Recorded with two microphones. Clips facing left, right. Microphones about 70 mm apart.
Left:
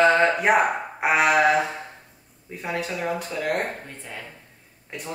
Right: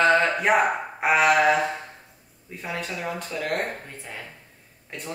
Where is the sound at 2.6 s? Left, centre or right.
Centre.